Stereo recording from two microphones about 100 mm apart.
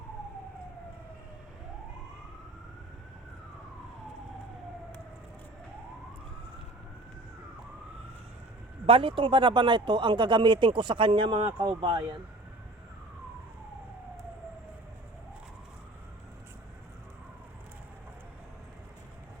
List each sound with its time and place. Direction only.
8.9 s speech: 65° right (ahead or behind)
11.7 s speech: 65° right (ahead or behind)